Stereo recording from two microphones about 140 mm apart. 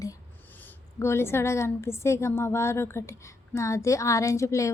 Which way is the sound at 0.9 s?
20° left (ahead or behind).